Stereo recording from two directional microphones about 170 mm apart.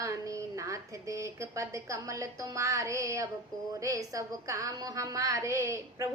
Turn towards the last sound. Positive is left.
turn(degrees=-15)  # may be behind; listen again after turning